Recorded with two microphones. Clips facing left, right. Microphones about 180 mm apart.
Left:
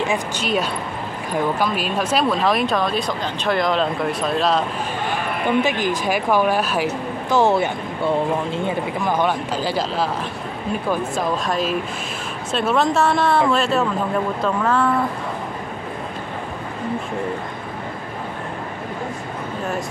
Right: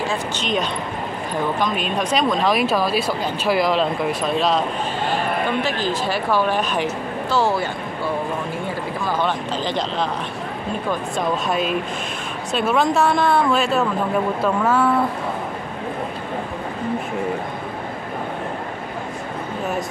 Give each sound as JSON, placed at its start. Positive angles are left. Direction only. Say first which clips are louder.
{"t": 0.1, "sound": "speech", "louder": "left 1 dB", "side_deg": 5}
{"t": 5.6, "sound": "speech", "louder": "left 2 dB", "side_deg": 15}
{"t": 7.2, "sound": "speech", "louder": "left 4 dB", "side_deg": 20}